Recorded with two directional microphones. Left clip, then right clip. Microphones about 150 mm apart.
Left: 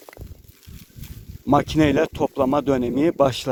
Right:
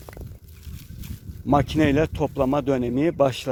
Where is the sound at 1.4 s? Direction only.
35° left (ahead or behind).